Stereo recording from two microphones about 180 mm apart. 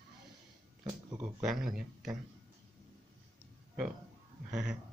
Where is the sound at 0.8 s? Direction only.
15° right (ahead or behind).